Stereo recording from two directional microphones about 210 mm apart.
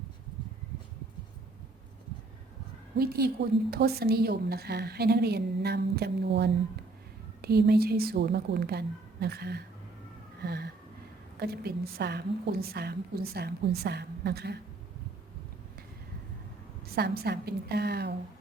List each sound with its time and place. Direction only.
3.0 s a woman's voice: 50° right (ahead or behind)
16.8 s a woman's voice: 45° right (ahead or behind)